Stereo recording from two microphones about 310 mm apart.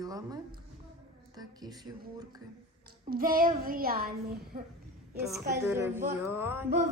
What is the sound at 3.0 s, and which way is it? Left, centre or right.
Speech, right.